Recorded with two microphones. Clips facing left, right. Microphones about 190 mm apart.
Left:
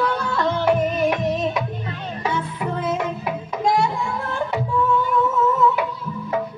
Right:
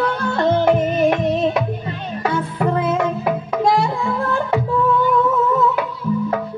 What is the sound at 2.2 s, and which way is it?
Music, 60° right (ahead or behind).